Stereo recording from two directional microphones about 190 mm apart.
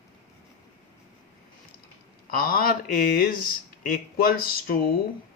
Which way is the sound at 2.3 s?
50° left (ahead or behind).